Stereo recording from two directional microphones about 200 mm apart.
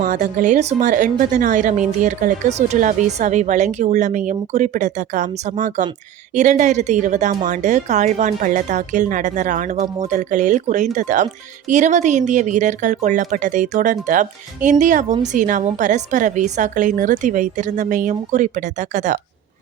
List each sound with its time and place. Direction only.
0.0 s a woman's voice: 40° right (ahead or behind)